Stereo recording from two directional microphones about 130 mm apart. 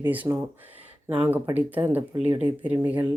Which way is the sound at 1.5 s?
15° right (ahead or behind).